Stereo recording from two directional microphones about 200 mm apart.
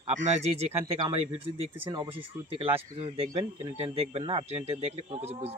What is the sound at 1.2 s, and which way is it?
Speech, 25° right (ahead or behind).